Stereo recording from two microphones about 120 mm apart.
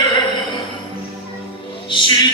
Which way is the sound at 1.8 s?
40° left (ahead or behind).